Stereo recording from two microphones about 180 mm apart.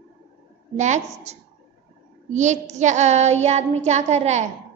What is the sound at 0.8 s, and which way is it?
A woman's voice, 40° right (ahead or behind).